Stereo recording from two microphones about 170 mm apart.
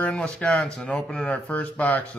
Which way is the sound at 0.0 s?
5° left (ahead or behind).